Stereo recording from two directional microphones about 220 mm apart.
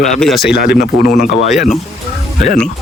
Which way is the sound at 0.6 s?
40° left (ahead or behind).